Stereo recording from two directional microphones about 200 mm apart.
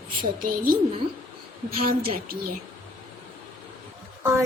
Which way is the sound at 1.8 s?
45° right (ahead or behind).